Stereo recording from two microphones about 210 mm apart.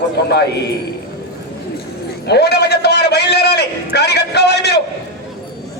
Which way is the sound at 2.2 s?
50° left (ahead or behind).